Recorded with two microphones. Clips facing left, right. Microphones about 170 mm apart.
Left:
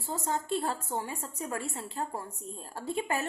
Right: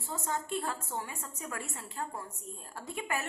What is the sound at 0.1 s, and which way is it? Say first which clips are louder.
A woman's voice: left 4 dB; 30° left (ahead or behind).